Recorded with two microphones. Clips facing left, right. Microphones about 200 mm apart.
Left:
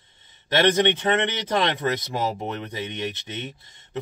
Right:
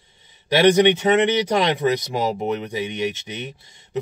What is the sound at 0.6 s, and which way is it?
Speech, 10° right (ahead or behind).